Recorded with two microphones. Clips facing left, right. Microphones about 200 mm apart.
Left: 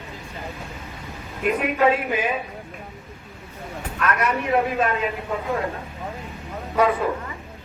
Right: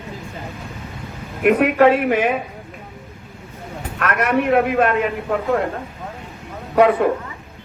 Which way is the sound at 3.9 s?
60° right (ahead or behind).